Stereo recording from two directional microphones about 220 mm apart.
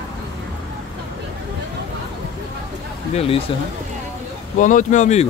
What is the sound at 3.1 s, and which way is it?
Speech, 25° left (ahead or behind).